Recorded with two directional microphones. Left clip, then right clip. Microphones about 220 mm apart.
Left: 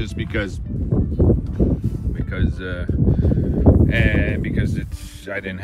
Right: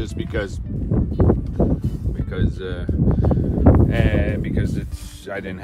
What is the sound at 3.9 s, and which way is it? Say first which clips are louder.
Speech: left 2 dB; 20° right (ahead or behind).